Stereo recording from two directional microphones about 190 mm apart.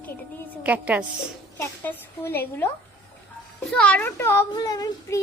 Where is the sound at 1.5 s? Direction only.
10° left (ahead or behind).